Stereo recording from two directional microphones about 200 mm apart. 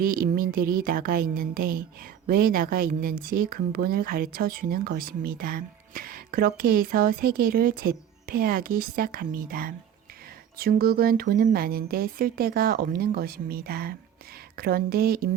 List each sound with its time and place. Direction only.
0.0 s speech: 45° right (ahead or behind)